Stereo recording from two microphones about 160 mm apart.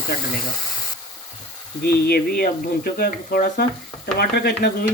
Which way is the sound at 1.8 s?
70° left (ahead or behind).